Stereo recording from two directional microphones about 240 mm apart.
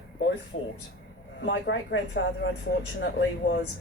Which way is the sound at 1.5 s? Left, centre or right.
Left.